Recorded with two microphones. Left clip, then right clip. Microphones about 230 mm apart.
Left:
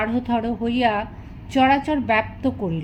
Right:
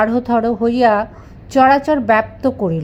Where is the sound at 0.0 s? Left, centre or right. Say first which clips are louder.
Right 8 dB; right.